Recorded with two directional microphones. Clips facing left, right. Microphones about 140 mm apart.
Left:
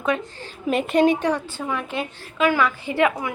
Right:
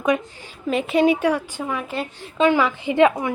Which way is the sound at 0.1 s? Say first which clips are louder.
Right 3 dB; 15° right (ahead or behind).